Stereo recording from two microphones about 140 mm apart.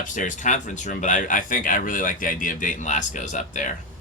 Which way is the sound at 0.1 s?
65° left (ahead or behind).